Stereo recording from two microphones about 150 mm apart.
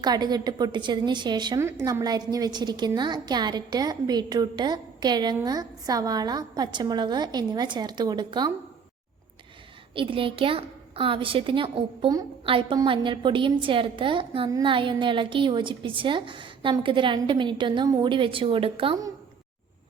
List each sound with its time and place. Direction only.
0.0 s a woman's voice: 25° right (ahead or behind)
9.9 s a woman's voice: 35° right (ahead or behind)